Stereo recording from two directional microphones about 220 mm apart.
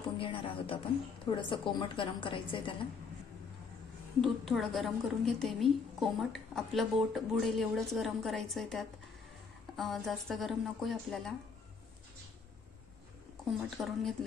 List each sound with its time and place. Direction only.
0.2 s music: 25° left (ahead or behind)
1.2 s a woman's voice: 20° left (ahead or behind)
4.2 s a woman's voice: centre (ahead or behind)
13.5 s a woman's voice: centre (ahead or behind)